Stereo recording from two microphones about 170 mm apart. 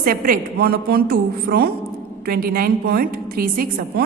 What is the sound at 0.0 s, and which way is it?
A woman's voice, 55° right (ahead or behind).